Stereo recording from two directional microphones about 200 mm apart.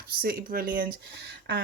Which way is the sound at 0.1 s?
45° right (ahead or behind).